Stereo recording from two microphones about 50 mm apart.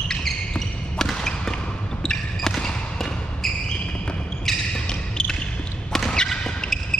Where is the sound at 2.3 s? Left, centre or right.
Centre.